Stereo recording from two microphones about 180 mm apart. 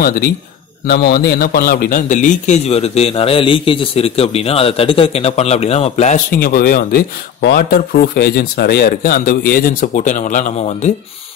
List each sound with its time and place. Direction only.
0.0 s a man's voice: 55° left (ahead or behind)